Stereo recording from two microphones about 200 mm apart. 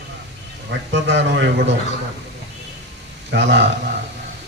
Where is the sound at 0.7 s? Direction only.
60° right (ahead or behind).